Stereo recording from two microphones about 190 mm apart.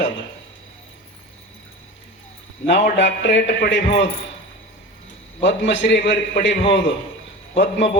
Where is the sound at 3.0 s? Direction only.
70° left (ahead or behind).